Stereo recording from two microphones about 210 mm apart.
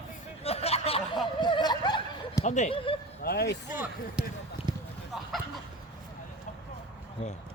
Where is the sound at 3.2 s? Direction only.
50° left (ahead or behind).